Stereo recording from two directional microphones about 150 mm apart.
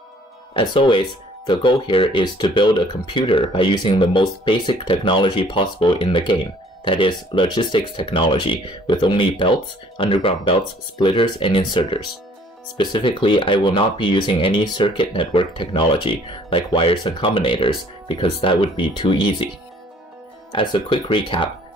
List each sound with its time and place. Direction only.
0.6 s speech: 35° left (ahead or behind)
20.5 s speech: 30° left (ahead or behind)